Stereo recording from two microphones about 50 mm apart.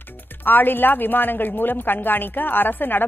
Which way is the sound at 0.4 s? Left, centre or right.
Left.